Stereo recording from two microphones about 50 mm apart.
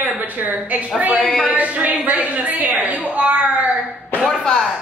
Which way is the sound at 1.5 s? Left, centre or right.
Right.